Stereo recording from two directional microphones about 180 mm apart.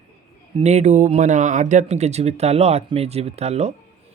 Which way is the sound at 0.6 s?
40° right (ahead or behind).